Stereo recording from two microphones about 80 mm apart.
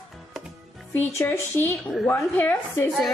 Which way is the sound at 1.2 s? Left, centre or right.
Left.